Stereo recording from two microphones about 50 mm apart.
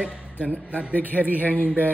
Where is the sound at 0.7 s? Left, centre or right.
Left.